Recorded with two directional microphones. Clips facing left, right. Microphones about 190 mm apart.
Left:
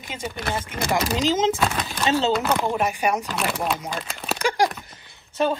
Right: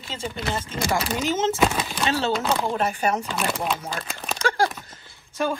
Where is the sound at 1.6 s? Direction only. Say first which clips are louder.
Right 2 dB; 10° right (ahead or behind).